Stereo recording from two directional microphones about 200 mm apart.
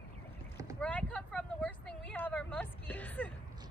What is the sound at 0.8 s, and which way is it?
Vehicle, 5° left (ahead or behind).